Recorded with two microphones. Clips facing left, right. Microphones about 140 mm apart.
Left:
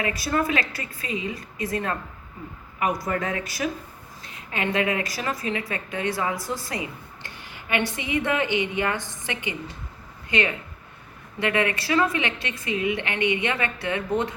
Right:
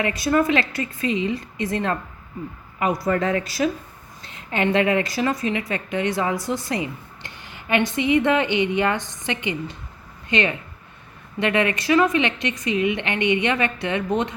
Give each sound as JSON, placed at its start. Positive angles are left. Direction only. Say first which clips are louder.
{"t": 0.0, "sound": "a woman's voice", "louder": "right 5 dB", "side_deg": -20}
{"t": 3.1, "sound": "a woman's voice", "louder": "right 6 dB", "side_deg": -35}